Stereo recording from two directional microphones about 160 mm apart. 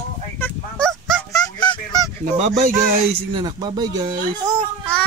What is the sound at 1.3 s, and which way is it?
Honk, 30° left (ahead or behind).